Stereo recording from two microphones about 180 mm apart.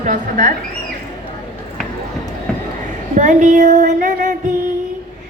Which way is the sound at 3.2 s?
40° right (ahead or behind).